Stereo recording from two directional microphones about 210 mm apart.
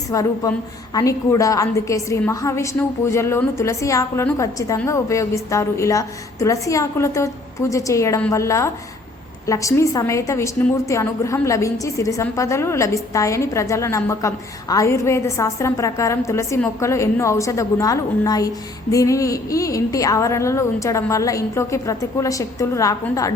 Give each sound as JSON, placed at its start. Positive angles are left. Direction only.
{"t": 0.1, "sound": "a woman's voice", "side_deg": 15}